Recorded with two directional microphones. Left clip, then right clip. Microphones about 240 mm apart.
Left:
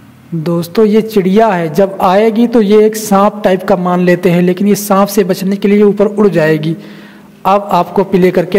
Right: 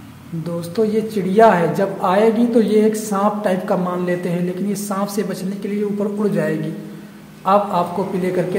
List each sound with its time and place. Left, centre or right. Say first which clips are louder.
0.4 s speech: left 9 dB; left